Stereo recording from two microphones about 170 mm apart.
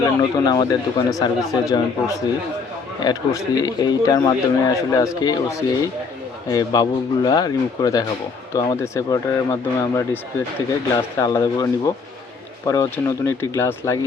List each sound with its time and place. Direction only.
0.0 s speech: 20° left (ahead or behind)